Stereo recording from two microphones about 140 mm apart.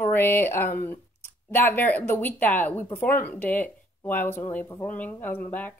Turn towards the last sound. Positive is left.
turn(degrees=15)  # may be behind; listen again after turning